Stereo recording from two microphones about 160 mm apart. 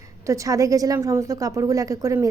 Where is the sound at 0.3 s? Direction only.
20° right (ahead or behind).